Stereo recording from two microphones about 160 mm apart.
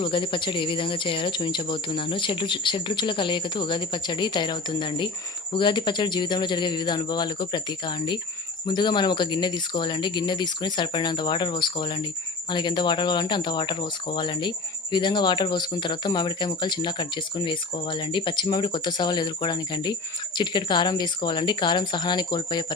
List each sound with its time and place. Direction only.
0.0 s speech: 30° left (ahead or behind)